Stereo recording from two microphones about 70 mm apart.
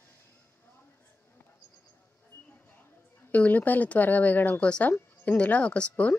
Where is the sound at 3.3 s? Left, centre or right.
Left.